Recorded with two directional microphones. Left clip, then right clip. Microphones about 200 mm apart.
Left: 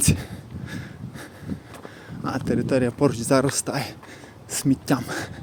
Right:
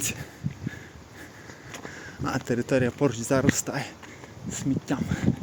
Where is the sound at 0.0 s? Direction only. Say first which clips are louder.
Left 7 dB; 20° left (ahead or behind).